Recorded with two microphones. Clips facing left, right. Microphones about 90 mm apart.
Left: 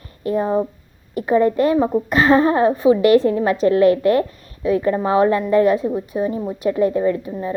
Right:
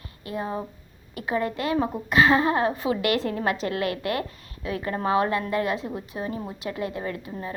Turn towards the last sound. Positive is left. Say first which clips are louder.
# left 12 dB
turn(degrees=30)  # may be behind; listen again after turning